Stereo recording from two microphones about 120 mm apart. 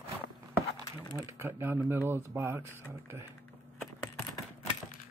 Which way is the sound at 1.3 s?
20° right (ahead or behind).